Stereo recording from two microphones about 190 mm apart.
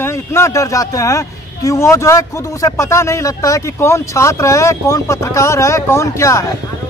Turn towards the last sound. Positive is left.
turn(degrees=15)  # may be behind; listen again after turning